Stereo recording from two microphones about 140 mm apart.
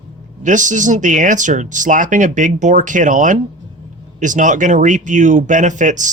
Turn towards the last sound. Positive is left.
turn(degrees=-65)  # may be behind; listen again after turning